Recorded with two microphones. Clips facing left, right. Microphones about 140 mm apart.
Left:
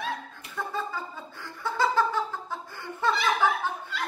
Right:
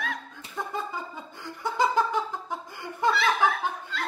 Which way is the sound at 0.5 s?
15° right (ahead or behind).